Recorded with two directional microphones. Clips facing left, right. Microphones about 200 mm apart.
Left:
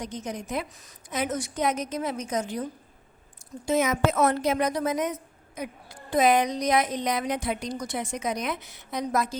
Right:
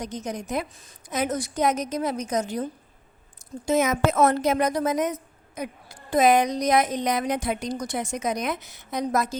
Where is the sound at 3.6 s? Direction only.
45° right (ahead or behind).